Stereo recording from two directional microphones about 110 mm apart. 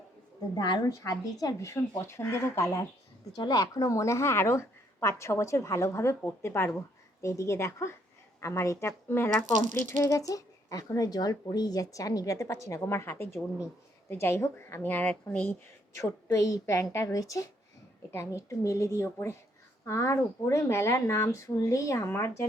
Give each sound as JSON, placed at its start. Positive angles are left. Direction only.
{"t": 0.5, "sound": "speech", "side_deg": 40}
{"t": 10.0, "sound": "speech", "side_deg": 30}
{"t": 16.0, "sound": "speech", "side_deg": 30}